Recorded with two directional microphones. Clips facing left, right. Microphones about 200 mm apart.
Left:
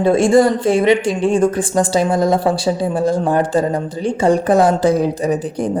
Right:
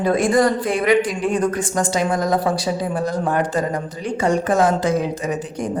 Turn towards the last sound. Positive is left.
turn(degrees=35)  # may be behind; listen again after turning